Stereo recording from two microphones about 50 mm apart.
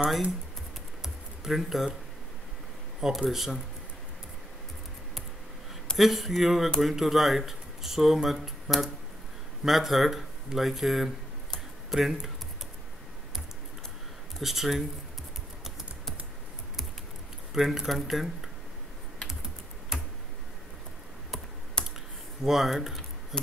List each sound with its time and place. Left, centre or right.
1.0 s a sound: centre
3.0 s speech: centre
5.9 s speech: centre
14.4 s speech: centre
17.6 s speech: centre
21.8 s computer keyboard: centre
22.4 s speech: centre
23.3 s speech: centre